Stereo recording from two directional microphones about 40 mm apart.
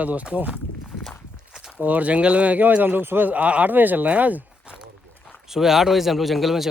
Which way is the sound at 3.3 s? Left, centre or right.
Right.